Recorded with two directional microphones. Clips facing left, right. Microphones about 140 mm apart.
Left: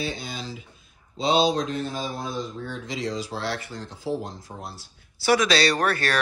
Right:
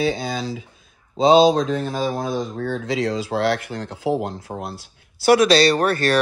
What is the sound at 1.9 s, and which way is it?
Speech, 90° right.